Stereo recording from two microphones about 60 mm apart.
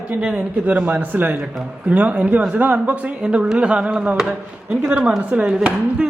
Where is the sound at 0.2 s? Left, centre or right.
Right.